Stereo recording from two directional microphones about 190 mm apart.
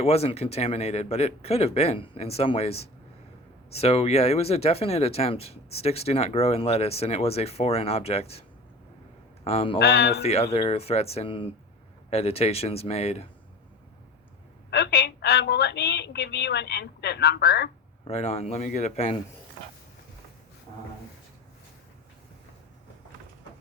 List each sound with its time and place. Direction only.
0.0 s speech: 30° left (ahead or behind)
9.7 s a woman's voice: 60° left (ahead or behind)
10.2 s speech: 35° left (ahead or behind)
14.7 s a woman's voice: 60° left (ahead or behind)
18.0 s speech: 30° left (ahead or behind)